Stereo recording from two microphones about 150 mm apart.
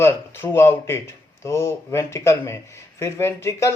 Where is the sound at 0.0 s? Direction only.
15° left (ahead or behind).